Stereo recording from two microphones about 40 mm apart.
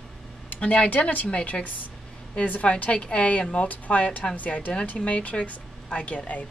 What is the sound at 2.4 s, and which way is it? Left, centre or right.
Speech, left.